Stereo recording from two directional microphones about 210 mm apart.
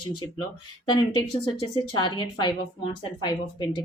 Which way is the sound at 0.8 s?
20° left (ahead or behind).